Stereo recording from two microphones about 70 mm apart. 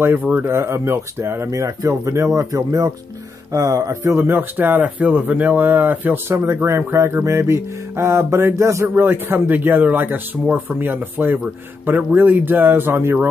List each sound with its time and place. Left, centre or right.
0.0 s speech: right
1.5 s speech: right
8.8 s speech: right